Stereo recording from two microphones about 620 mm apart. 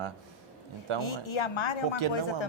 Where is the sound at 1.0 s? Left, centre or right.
Left.